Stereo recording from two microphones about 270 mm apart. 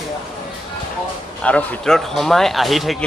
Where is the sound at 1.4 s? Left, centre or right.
Centre.